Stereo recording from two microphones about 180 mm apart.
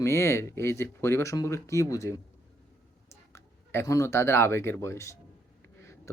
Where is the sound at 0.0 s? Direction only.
15° left (ahead or behind).